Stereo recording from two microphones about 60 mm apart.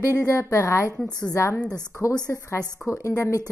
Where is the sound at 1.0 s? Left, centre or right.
Left.